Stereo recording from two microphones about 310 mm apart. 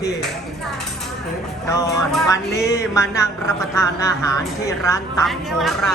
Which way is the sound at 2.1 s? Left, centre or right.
Centre.